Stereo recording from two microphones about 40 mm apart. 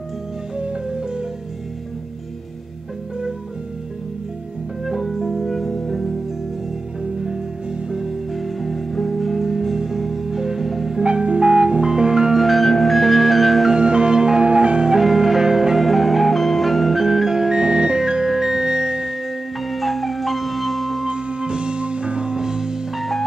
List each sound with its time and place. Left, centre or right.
0.6 s music: right
4.8 s music: centre
7.9 s music: centre
11.0 s music: right
12.4 s music: centre
13.7 s music: right
15.0 s music: centre
19.6 s music: centre
21.0 s music: right